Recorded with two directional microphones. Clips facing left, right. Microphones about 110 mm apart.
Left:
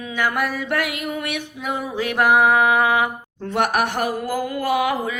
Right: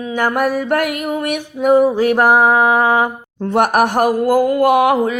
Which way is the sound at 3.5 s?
45° right (ahead or behind).